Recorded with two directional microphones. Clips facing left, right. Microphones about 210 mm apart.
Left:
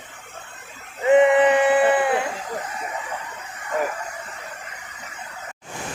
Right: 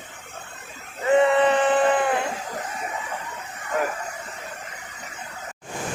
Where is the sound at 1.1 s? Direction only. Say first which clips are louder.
Left 3 dB; 15° left (ahead or behind).